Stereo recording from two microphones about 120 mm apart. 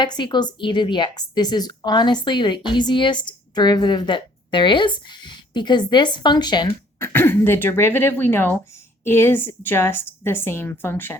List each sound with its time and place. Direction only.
0.0 s a woman's voice: 40° left (ahead or behind)
7.0 s a woman's voice: 20° left (ahead or behind)